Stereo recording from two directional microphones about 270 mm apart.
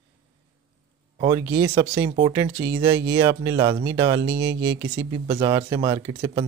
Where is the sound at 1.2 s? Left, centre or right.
Centre.